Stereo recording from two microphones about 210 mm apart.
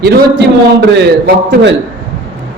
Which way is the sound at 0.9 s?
50° right (ahead or behind).